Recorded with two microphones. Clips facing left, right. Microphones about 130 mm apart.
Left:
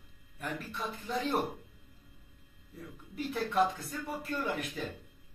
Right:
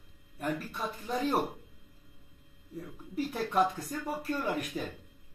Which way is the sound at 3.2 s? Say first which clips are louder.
Right 1 dB; 40° right (ahead or behind).